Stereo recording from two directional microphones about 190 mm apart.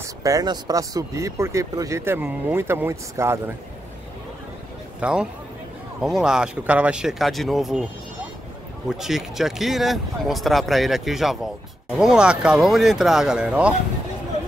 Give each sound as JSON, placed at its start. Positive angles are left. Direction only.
{"t": 0.2, "sound": "speech", "side_deg": -20}
{"t": 5.0, "sound": "speech", "side_deg": -5}
{"t": 8.8, "sound": "speech", "side_deg": 0}